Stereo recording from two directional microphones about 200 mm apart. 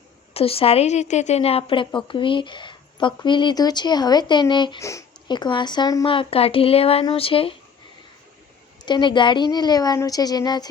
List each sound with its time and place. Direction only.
0.3 s a woman's voice: 30° left (ahead or behind)
8.8 s a woman's voice: 20° left (ahead or behind)